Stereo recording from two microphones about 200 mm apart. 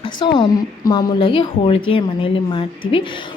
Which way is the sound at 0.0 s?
25° left (ahead or behind).